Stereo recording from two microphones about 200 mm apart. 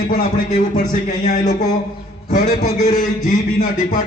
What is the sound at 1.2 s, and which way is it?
A man's voice, 35° left (ahead or behind).